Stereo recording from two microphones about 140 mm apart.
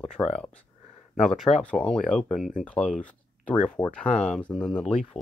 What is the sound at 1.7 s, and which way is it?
Speech, 5° left (ahead or behind).